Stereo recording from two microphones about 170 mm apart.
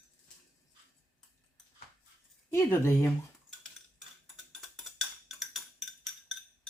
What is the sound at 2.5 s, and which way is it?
Speech, 15° left (ahead or behind).